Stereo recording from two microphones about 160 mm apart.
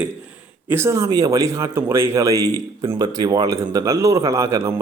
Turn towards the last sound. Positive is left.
turn(degrees=-20)  # may be behind; listen again after turning